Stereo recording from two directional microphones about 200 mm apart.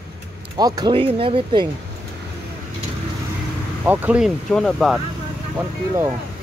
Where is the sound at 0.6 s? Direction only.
20° right (ahead or behind).